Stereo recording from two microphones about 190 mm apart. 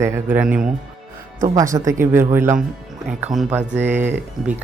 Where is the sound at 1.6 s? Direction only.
15° right (ahead or behind).